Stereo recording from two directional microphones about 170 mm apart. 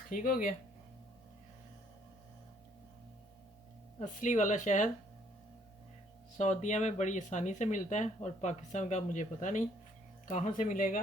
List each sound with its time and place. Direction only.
0.1 s speech: 50° left (ahead or behind)
4.0 s speech: 45° left (ahead or behind)
6.3 s speech: 45° left (ahead or behind)